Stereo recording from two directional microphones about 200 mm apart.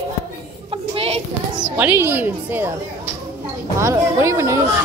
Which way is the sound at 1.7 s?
10° right (ahead or behind).